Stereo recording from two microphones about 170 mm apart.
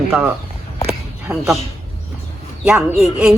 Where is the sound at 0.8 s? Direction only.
5° right (ahead or behind).